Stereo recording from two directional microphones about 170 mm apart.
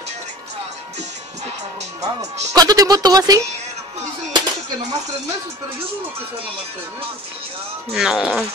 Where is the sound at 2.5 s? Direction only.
20° right (ahead or behind).